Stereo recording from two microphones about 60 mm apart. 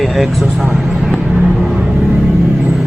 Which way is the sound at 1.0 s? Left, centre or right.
Centre.